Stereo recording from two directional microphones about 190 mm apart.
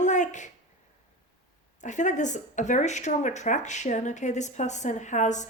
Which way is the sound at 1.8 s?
40° left (ahead or behind).